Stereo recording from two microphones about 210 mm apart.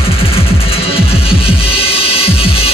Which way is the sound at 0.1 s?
25° left (ahead or behind).